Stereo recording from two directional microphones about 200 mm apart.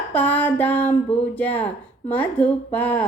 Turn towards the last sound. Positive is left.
turn(degrees=10)  # may be behind; listen again after turning